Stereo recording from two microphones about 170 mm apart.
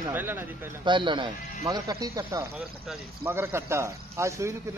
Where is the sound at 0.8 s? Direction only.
30° right (ahead or behind).